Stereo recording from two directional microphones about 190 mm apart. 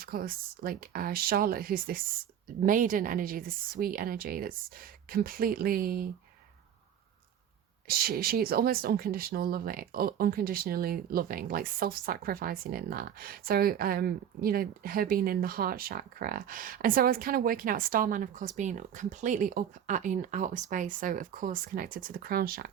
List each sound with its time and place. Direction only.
0.0 s speech: 50° right (ahead or behind)
7.9 s speech: 50° right (ahead or behind)